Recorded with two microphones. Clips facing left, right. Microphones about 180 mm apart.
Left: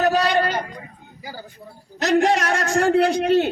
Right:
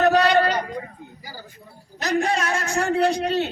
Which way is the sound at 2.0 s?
70° left (ahead or behind).